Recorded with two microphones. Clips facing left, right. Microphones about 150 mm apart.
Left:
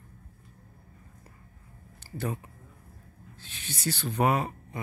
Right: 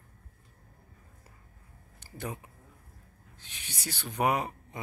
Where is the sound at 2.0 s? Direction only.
15° right (ahead or behind).